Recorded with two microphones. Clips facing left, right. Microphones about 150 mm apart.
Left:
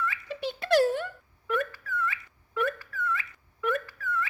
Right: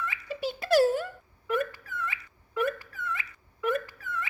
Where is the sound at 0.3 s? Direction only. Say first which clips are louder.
Right 1 dB; 5° right (ahead or behind).